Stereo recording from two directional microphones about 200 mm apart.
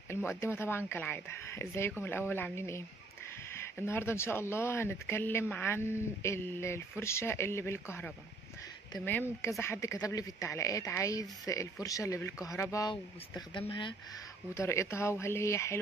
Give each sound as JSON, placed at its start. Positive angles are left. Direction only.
{"t": 0.1, "sound": "speech", "side_deg": 10}
{"t": 3.8, "sound": "speech", "side_deg": 10}
{"t": 9.4, "sound": "speech", "side_deg": 15}